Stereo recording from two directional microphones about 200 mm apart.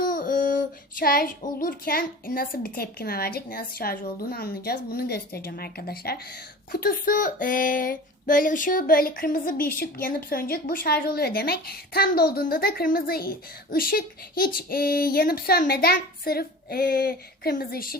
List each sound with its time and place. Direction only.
0.0 s child singing: 45° left (ahead or behind)